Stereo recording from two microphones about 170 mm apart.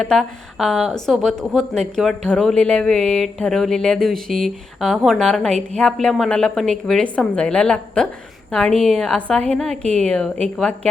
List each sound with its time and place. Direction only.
0.0 s a woman's voice: centre (ahead or behind)